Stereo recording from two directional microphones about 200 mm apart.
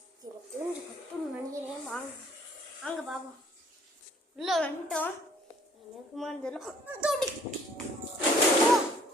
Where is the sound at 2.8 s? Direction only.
Centre (ahead or behind).